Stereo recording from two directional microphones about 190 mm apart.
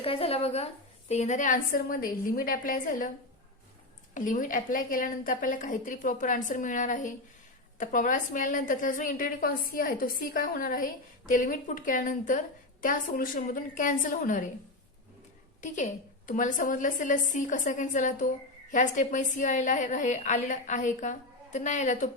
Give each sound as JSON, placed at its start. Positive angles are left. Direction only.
{"t": 0.0, "sound": "a woman's voice", "side_deg": 30}
{"t": 4.1, "sound": "a woman's voice", "side_deg": 45}
{"t": 15.6, "sound": "a woman's voice", "side_deg": 40}